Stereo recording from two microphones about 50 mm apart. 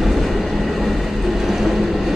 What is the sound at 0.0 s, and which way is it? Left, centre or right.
Train, centre.